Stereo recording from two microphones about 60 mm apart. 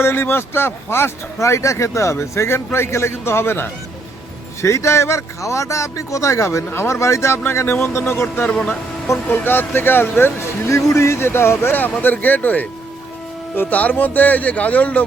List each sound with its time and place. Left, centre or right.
0.0 s speech: left
4.6 s speech: left
8.5 s speech: centre
9.3 s speech: left
10.7 s speech: left
12.0 s speech: left